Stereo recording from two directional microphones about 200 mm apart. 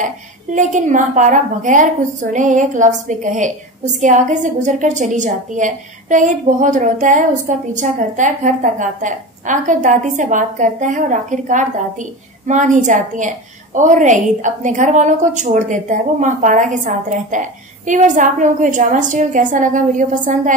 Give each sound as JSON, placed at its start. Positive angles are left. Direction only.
{"t": 0.0, "sound": "a woman's voice", "side_deg": -40}